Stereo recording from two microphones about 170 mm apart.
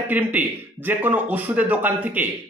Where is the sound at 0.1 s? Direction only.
10° right (ahead or behind).